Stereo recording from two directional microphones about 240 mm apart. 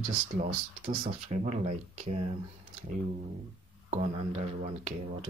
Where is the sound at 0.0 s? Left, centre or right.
Right.